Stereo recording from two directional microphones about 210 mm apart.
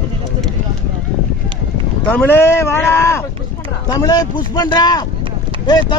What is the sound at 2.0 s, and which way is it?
A man's voice, 10° left (ahead or behind).